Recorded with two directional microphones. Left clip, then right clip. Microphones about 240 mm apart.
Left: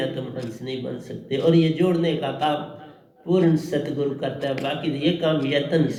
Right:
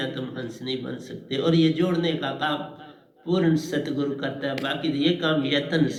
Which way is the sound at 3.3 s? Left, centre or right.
Right.